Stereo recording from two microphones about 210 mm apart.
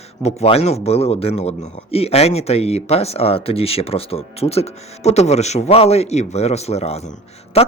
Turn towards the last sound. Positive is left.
turn(degrees=30)  # may be behind; listen again after turning